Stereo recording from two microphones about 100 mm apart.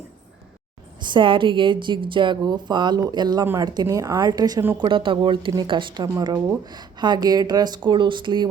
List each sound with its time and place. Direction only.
0.9 s a woman's voice: 50° right (ahead or behind)
4.8 s a woman's voice: 55° right (ahead or behind)